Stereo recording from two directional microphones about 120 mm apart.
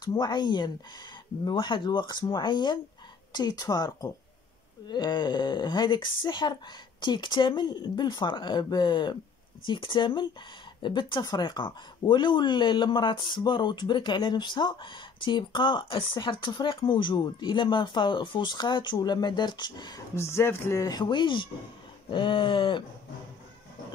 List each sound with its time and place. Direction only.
0.0 s speech: 35° left (ahead or behind)
20.2 s speech: 25° left (ahead or behind); by 21.5 s 40° left (ahead or behind)
22.1 s a sound: 45° left (ahead or behind)